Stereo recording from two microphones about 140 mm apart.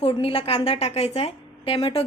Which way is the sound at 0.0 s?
45° left (ahead or behind).